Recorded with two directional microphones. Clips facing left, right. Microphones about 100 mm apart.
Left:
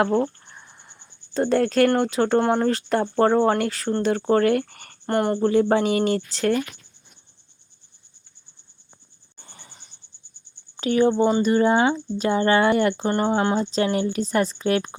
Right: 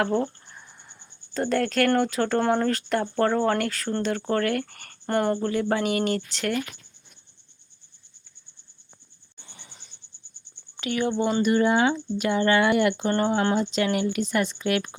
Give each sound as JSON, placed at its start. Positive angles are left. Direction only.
{"t": 0.0, "sound": "speech", "side_deg": 30}
{"t": 1.3, "sound": "speech", "side_deg": 25}
{"t": 5.0, "sound": "speech", "side_deg": 5}
{"t": 5.4, "sound": "speech", "side_deg": 25}
{"t": 9.4, "sound": "cricket", "side_deg": 40}
{"t": 10.8, "sound": "speech", "side_deg": 35}